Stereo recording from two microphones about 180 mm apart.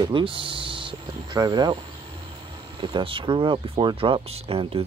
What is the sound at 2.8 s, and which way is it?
Speech, 25° right (ahead or behind).